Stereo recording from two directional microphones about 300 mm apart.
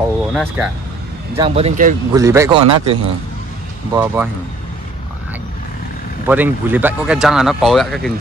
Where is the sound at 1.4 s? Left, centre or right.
Centre.